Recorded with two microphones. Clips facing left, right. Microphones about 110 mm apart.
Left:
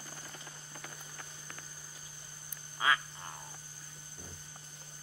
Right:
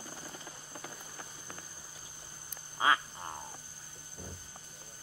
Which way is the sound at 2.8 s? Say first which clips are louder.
Right 3 dB; 25° right (ahead or behind).